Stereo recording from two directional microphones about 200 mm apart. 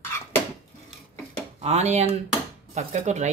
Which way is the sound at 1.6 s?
35° right (ahead or behind).